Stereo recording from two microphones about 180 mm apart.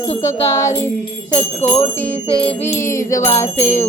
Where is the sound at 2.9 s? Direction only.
15° left (ahead or behind).